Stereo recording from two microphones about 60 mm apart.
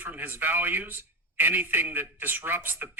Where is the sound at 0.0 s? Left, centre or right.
Right.